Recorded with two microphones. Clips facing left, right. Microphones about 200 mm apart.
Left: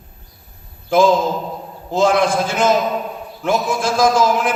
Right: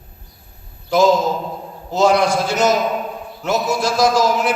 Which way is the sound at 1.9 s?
50° left (ahead or behind).